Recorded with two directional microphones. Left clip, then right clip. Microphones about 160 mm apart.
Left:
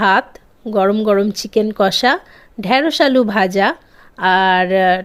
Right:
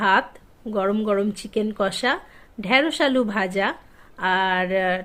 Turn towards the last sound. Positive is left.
turn(degrees=50)  # may be behind; listen again after turning